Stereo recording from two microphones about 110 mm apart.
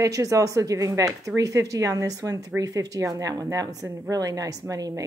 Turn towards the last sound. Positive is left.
turn(degrees=-30)  # may be behind; listen again after turning